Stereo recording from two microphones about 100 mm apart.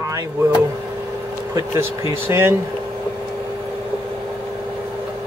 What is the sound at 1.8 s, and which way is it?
Speech, 25° right (ahead or behind).